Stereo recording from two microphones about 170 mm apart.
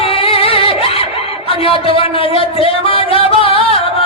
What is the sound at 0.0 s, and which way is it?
Singing, 35° left (ahead or behind).